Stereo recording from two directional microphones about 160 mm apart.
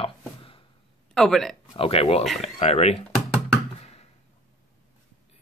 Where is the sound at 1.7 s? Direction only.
35° left (ahead or behind).